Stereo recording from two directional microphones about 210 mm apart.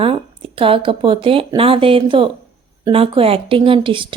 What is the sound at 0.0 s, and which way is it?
A woman's voice, 25° right (ahead or behind).